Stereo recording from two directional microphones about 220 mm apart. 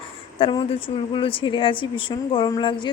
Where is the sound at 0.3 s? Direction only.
25° left (ahead or behind).